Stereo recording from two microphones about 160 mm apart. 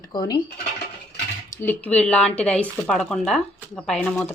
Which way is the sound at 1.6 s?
10° left (ahead or behind).